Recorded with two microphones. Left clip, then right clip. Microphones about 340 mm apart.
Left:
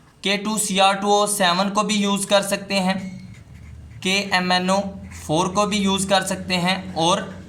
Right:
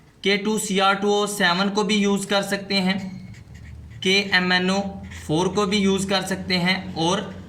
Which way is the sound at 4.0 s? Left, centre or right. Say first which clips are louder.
Right 1 dB; centre.